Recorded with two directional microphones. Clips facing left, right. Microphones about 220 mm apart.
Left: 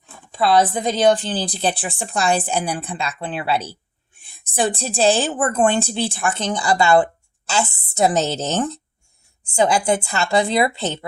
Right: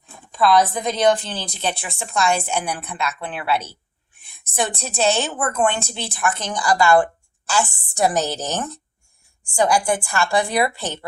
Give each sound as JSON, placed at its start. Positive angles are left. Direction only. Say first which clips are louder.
{"t": 0.3, "sound": "a woman's voice", "louder": "even", "side_deg": 25}